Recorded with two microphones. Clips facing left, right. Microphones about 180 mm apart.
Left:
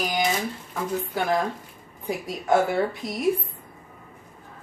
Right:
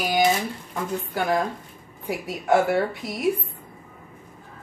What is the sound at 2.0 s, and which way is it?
A woman's voice, 5° right (ahead or behind).